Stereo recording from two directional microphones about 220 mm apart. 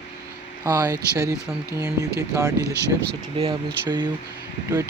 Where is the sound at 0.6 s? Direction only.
15° right (ahead or behind).